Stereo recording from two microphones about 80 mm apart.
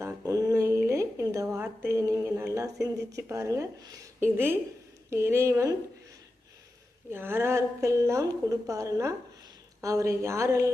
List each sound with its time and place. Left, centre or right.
0.0 s a sound: right
1.5 s a sound: right
3.2 s a woman's voice: right
3.8 s a woman's voice: right
5.1 s a woman's voice: right
7.1 s a woman's voice: right